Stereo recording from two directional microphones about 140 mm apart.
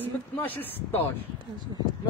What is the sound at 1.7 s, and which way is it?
Speech, 30° right (ahead or behind).